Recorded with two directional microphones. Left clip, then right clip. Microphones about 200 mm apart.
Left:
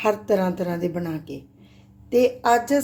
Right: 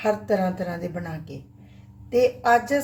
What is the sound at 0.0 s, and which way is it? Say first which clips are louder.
Speech: left 2 dB; 35° left (ahead or behind).